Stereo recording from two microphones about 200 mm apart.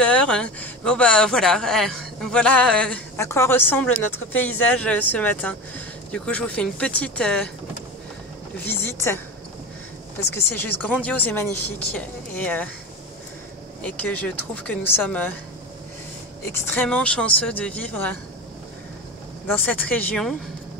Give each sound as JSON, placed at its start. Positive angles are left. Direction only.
{"t": 0.0, "sound": "speech", "side_deg": 5}
{"t": 3.9, "sound": "a woman's voice", "side_deg": 90}
{"t": 4.7, "sound": "speech", "side_deg": 5}
{"t": 8.6, "sound": "a woman's voice", "side_deg": 10}
{"t": 10.3, "sound": "speech", "side_deg": 10}
{"t": 13.8, "sound": "speech", "side_deg": 5}
{"t": 16.5, "sound": "speech", "side_deg": 10}
{"t": 19.5, "sound": "speech", "side_deg": 10}